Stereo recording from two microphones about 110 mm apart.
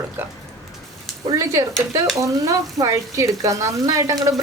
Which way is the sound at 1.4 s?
35° right (ahead or behind).